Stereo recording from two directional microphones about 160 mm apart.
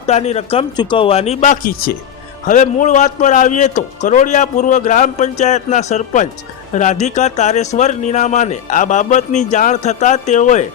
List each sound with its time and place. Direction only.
0.0 s speech: 40° left (ahead or behind)
2.5 s speech: 55° left (ahead or behind)